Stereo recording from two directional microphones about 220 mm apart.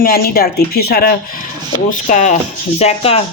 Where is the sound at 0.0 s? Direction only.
45° left (ahead or behind).